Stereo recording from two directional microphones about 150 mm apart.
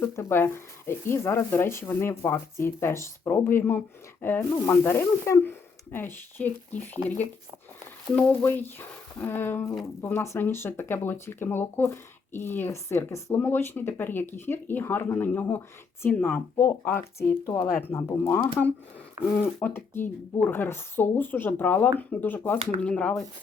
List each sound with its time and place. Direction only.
0.0 s speech: 15° left (ahead or behind)